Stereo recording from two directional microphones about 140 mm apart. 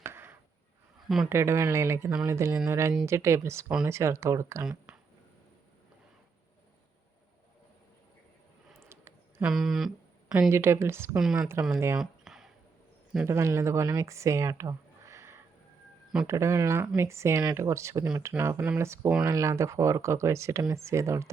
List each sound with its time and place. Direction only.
0.0 s a sound: 15° right (ahead or behind)
1.0 s speech: centre (ahead or behind)
1.3 s speech: 20° right (ahead or behind)
4.6 s speech: 5° right (ahead or behind)
8.9 s a sound: 15° right (ahead or behind)
9.5 s speech: centre (ahead or behind)
10.5 s a woman's voice: 20° right (ahead or behind)
11.2 s a woman's voice: 5° right (ahead or behind)
11.9 s a sound: 5° right (ahead or behind)
13.2 s speech: 20° right (ahead or behind)